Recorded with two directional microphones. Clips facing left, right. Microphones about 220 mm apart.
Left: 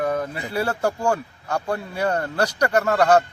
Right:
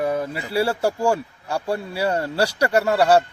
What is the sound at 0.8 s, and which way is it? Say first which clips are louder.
A man's voice: right 2 dB; 10° right (ahead or behind).